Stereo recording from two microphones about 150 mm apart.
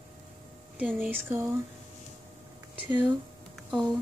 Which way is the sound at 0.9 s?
15° right (ahead or behind).